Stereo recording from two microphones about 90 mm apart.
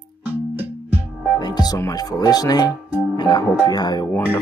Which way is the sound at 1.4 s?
50° left (ahead or behind).